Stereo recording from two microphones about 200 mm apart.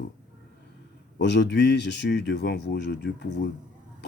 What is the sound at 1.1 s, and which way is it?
Speech, 60° left (ahead or behind).